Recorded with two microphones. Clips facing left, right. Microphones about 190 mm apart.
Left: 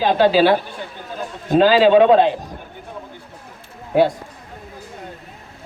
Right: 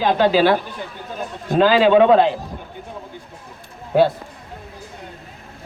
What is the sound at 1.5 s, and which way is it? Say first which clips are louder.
Speech: left 1 dB; 30° left (ahead or behind).